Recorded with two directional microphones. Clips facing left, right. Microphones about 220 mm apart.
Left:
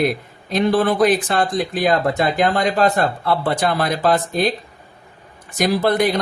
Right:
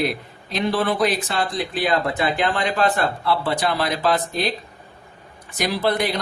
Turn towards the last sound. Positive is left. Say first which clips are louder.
# left 5 dB
turn(degrees=50)  # may be behind; listen again after turning